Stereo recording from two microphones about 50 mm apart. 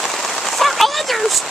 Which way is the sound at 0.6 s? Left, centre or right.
Centre.